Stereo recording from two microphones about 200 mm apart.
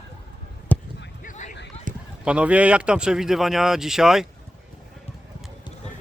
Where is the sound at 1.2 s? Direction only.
35° left (ahead or behind).